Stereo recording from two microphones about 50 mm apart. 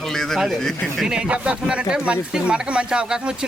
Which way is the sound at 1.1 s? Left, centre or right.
Right.